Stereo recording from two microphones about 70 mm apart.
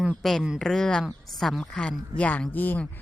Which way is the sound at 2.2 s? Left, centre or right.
Left.